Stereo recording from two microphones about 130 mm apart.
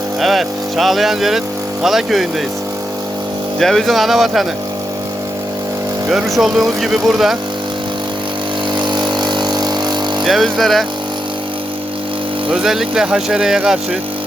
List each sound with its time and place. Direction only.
0.2 s speech: centre (ahead or behind)
3.6 s speech: centre (ahead or behind)
6.1 s speech: 5° right (ahead or behind)
8.8 s vehicle: 35° right (ahead or behind)
10.2 s speech: centre (ahead or behind)
12.5 s speech: 5° right (ahead or behind)